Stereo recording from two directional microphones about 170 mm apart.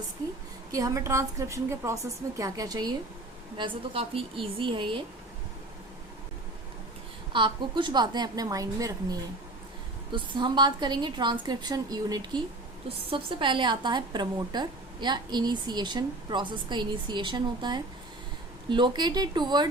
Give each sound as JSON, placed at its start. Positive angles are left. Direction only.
{"t": 0.7, "sound": "a woman's voice", "side_deg": -20}
{"t": 3.6, "sound": "a woman's voice", "side_deg": -35}
{"t": 7.3, "sound": "a woman's voice", "side_deg": -30}